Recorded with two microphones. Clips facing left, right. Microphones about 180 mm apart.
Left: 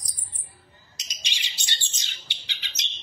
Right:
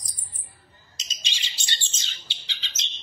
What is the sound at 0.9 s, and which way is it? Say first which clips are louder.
Bird: right 1 dB; 15° left (ahead or behind).